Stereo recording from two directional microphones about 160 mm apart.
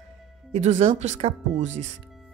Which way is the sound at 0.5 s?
45° right (ahead or behind).